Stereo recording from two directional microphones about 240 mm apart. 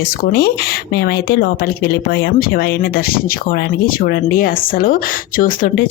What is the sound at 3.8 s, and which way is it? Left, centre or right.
Speech, left.